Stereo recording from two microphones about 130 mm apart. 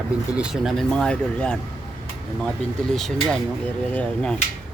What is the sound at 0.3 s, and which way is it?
Speech, 5° right (ahead or behind).